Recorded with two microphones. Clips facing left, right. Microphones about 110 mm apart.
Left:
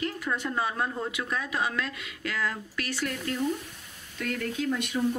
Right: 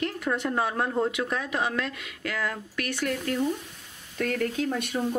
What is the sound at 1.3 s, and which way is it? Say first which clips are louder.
Speech: right 2 dB; 45° right (ahead or behind).